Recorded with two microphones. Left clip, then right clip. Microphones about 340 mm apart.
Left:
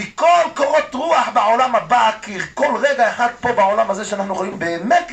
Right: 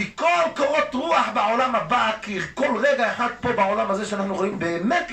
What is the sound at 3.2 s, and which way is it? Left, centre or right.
A man's voice, centre.